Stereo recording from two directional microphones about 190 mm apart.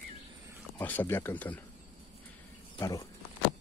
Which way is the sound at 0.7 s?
10° left (ahead or behind).